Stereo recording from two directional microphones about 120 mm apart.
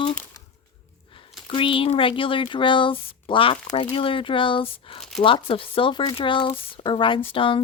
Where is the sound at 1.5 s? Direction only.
45° left (ahead or behind).